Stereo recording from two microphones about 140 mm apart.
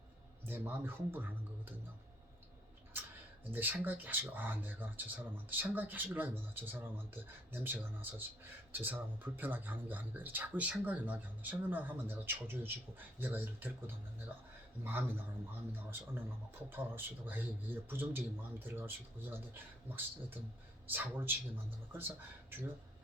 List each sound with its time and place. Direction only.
0.4 s speech: 15° right (ahead or behind)
3.5 s speech: 15° right (ahead or behind)
20.9 s speech: 15° right (ahead or behind)